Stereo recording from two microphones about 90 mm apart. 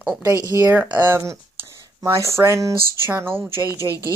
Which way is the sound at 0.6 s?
20° right (ahead or behind).